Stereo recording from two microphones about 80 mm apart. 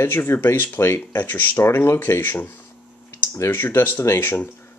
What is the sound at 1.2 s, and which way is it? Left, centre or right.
Speech, left.